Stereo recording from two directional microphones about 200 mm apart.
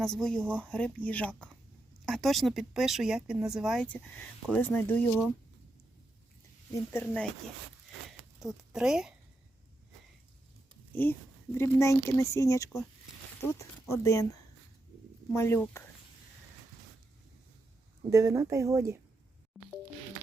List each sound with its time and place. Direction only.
0.0 s speech: 5° left (ahead or behind)
6.9 s speech: 5° left (ahead or behind)
8.4 s a woman's voice: centre (ahead or behind)
10.9 s speech: 10° left (ahead or behind)
18.1 s speech: 15° right (ahead or behind)